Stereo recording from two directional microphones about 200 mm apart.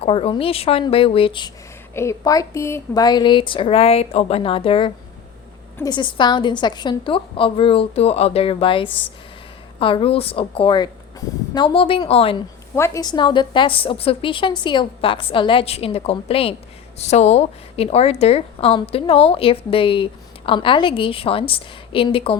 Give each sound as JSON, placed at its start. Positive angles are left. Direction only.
{"t": 0.0, "sound": "a woman's voice", "side_deg": 30}
{"t": 12.7, "sound": "a woman's voice", "side_deg": 15}